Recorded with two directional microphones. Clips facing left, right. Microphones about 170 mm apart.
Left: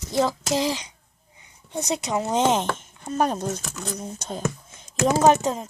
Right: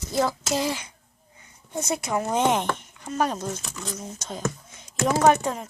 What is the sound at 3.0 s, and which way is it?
Speech, 30° left (ahead or behind).